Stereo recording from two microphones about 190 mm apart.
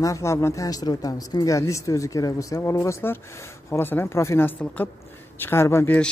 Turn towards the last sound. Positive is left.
turn(degrees=10)  # may be behind; listen again after turning